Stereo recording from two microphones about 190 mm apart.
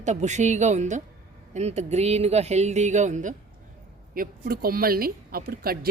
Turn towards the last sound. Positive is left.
turn(degrees=-55)  # may be behind; listen again after turning